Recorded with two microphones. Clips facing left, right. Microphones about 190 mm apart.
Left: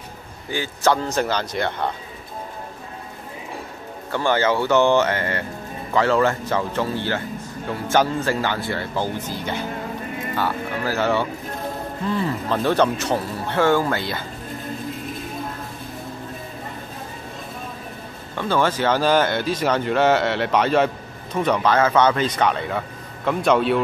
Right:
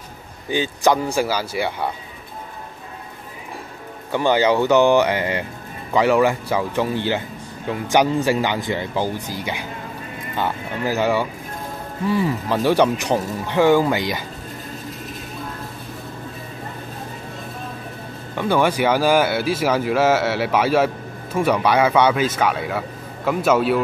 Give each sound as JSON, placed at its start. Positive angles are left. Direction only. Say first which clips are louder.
{"t": 0.5, "sound": "speech", "louder": "right 2 dB", "side_deg": -15}
{"t": 4.1, "sound": "speech", "louder": "right 3 dB", "side_deg": -15}
{"t": 18.3, "sound": "speech", "louder": "right 2 dB", "side_deg": -15}